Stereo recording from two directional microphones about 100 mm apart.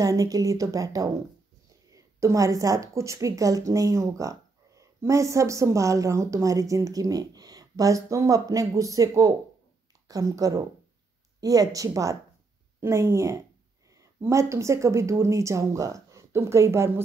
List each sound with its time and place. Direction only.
0.0 s a woman's voice: 35° right (ahead or behind)